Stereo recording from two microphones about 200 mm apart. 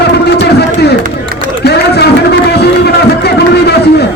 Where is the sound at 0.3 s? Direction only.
55° left (ahead or behind).